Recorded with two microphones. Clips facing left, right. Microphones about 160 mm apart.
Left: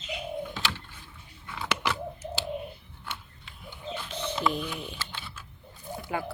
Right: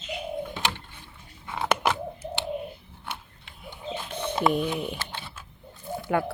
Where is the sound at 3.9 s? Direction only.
55° right (ahead or behind).